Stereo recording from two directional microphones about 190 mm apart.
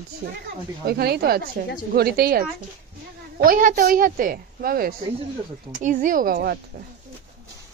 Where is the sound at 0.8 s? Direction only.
55° right (ahead or behind).